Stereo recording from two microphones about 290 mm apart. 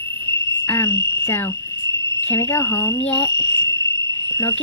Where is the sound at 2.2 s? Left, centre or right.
Centre.